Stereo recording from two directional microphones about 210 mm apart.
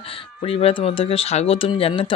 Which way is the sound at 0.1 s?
25° left (ahead or behind).